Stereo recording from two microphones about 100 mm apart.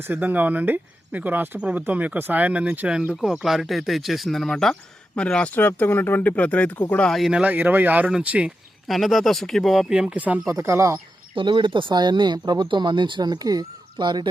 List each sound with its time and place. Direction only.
0.0 s speech: 20° right (ahead or behind); by 6.8 s 15° left (ahead or behind)
7.1 s speech: 5° right (ahead or behind)
8.9 s speech: centre (ahead or behind); by 10.4 s 15° right (ahead or behind)
10.4 s speech: 30° right (ahead or behind)
11.3 s speech: 55° right (ahead or behind)